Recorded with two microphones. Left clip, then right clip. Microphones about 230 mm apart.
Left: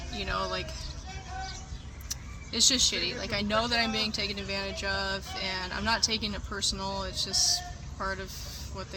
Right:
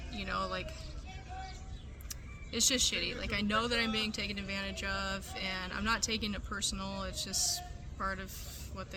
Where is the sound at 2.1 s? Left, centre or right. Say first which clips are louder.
Left 5 dB; centre.